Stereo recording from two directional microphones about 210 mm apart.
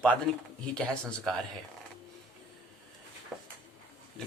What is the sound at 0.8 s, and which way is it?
Speech, centre (ahead or behind).